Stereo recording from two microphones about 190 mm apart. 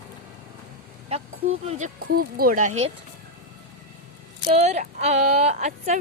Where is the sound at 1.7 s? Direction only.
40° right (ahead or behind).